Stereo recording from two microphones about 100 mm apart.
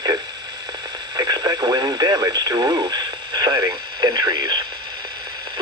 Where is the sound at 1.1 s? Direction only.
40° right (ahead or behind).